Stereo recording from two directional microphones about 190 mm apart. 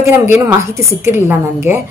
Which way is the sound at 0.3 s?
15° right (ahead or behind).